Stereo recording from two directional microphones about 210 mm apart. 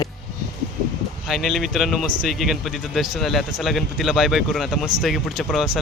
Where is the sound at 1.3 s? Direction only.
Centre (ahead or behind).